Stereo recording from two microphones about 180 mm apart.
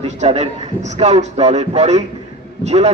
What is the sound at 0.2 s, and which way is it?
A man's voice, 40° right (ahead or behind).